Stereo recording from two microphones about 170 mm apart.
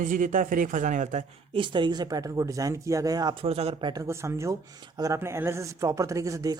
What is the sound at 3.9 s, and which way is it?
Speech, 15° right (ahead or behind).